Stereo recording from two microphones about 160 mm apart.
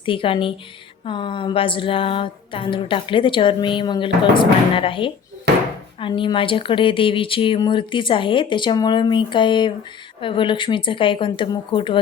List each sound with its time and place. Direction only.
0.0 s speech: 35° left (ahead or behind)
5.5 s a sound: 90° right
6.0 s speech: 30° left (ahead or behind)